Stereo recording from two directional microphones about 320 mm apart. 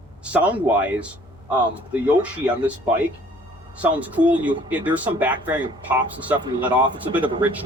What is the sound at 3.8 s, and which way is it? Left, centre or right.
Speech, centre.